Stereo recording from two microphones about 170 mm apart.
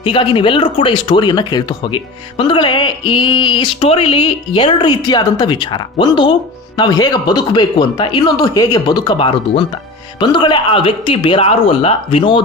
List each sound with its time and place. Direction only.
0.0 s speech: 30° left (ahead or behind)